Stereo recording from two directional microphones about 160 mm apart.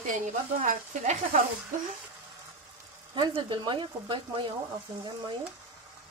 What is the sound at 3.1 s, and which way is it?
Speech, 30° right (ahead or behind).